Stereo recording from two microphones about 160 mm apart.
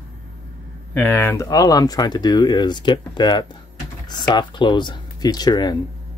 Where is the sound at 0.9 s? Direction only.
10° left (ahead or behind).